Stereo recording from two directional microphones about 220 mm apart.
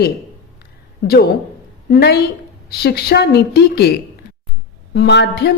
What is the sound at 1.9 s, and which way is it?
A woman's voice, 50° left (ahead or behind).